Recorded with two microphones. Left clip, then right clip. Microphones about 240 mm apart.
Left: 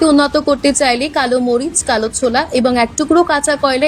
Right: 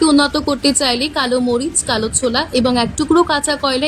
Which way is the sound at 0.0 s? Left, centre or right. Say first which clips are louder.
Left 2 dB; centre.